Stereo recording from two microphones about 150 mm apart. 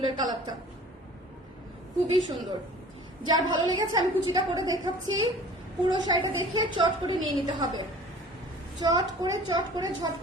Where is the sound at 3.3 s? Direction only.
30° right (ahead or behind).